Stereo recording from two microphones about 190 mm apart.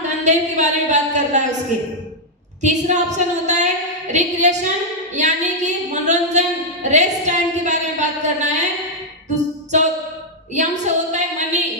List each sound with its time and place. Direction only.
0.2 s a woman's voice: 35° right (ahead or behind)
2.6 s a woman's voice: 40° right (ahead or behind)
9.3 s music: 40° right (ahead or behind)
10.5 s a sound: 40° right (ahead or behind)